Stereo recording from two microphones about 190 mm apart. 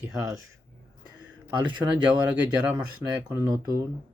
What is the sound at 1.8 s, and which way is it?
Speech, 5° right (ahead or behind).